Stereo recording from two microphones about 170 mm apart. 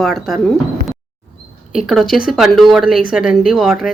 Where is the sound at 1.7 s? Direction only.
Centre (ahead or behind).